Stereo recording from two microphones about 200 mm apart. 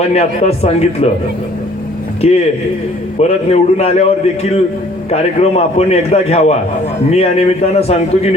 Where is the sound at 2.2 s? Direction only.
30° left (ahead or behind).